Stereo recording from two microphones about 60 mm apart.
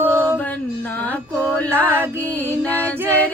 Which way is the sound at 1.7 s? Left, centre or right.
Right.